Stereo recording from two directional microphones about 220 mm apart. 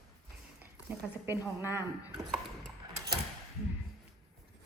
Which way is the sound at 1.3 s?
15° left (ahead or behind).